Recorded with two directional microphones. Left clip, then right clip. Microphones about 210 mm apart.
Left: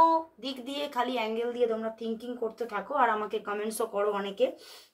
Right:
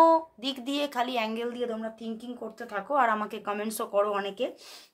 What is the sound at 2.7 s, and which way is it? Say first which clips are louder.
A woman's voice: right 2 dB; 45° right (ahead or behind).